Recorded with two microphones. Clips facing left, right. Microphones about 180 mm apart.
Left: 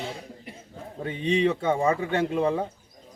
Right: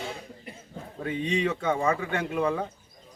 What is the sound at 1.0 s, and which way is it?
A man's voice, 30° left (ahead or behind).